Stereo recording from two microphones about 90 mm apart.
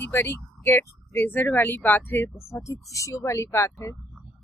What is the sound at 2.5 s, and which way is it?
Speech, 35° left (ahead or behind).